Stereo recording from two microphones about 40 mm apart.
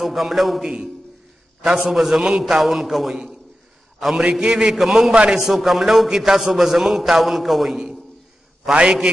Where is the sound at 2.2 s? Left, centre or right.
Centre.